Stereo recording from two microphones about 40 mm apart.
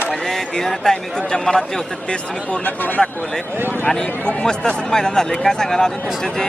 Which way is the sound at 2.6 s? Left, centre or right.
Left.